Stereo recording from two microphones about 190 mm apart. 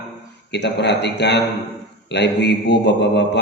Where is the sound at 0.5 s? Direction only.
65° left (ahead or behind).